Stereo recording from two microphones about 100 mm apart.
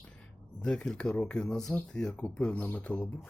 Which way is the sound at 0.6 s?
10° left (ahead or behind).